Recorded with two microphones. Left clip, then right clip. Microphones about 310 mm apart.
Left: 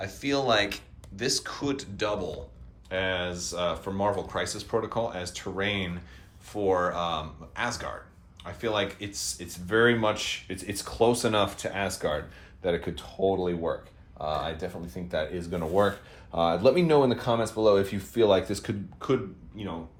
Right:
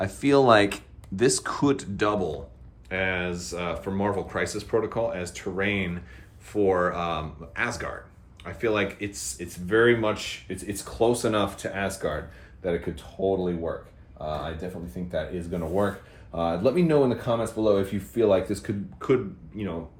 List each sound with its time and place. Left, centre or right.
0.0 s speech: centre
14.2 s speech: centre